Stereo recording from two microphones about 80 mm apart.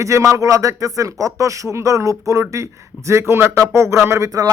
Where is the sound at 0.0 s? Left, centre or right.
Right.